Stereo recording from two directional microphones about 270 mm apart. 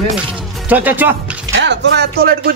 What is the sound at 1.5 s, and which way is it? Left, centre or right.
Speech, right.